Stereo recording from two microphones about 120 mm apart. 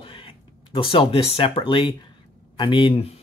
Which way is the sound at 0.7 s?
50° left (ahead or behind).